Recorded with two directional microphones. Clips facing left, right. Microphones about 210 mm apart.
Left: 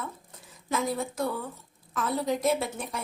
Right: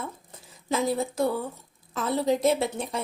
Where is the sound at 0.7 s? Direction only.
25° right (ahead or behind).